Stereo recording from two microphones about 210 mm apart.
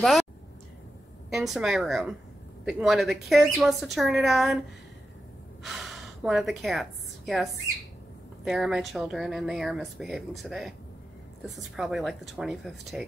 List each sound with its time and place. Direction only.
1.3 s speech: centre (ahead or behind)
5.6 s a woman's voice: centre (ahead or behind)
8.5 s speech: centre (ahead or behind)